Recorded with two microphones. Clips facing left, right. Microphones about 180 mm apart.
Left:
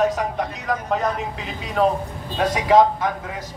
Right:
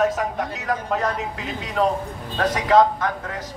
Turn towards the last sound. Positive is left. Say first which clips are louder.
# left 1 dB
turn(degrees=10)  # may be behind; listen again after turning